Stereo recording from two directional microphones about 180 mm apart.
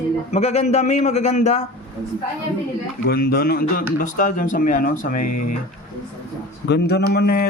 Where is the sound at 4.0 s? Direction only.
45° left (ahead or behind).